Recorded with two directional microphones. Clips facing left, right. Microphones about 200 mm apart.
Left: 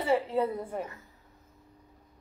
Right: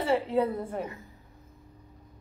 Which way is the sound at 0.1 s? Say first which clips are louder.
Right 1 dB; 5° left (ahead or behind).